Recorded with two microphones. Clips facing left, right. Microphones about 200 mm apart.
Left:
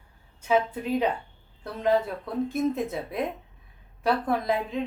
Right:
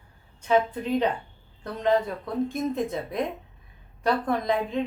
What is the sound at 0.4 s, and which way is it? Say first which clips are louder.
A woman's voice: right 1 dB; 5° left (ahead or behind).